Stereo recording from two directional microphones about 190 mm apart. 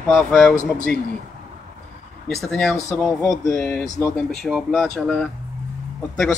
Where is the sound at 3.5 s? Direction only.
5° left (ahead or behind).